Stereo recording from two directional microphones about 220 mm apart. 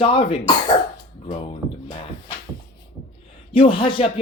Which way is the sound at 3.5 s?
25° left (ahead or behind).